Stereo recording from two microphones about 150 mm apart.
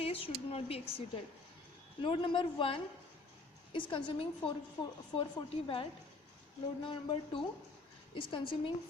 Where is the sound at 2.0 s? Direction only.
35° left (ahead or behind).